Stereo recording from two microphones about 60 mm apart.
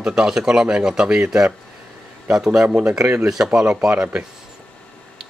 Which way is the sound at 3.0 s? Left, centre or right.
Right.